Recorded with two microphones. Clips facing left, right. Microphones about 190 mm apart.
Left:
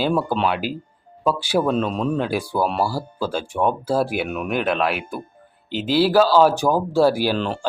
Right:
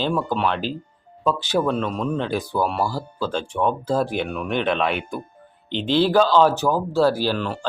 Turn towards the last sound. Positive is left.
turn(degrees=25)  # may be behind; listen again after turning